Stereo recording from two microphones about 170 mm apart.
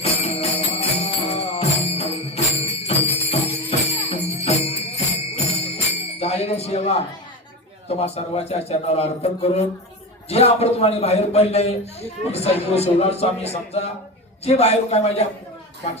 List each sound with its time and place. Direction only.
0.0 s jingle bell: 35° left (ahead or behind)
7.9 s a man's voice: 35° left (ahead or behind)